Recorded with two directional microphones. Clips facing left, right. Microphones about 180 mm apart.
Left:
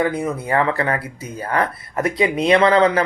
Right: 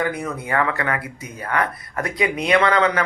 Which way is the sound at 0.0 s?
25° left (ahead or behind).